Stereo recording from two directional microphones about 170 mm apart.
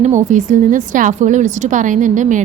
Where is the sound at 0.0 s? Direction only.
45° right (ahead or behind).